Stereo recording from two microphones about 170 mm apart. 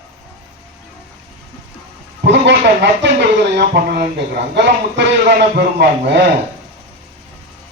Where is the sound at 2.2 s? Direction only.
90° right.